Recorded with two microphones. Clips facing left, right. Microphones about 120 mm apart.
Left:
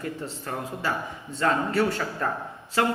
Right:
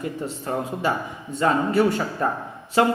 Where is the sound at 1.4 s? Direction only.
15° right (ahead or behind).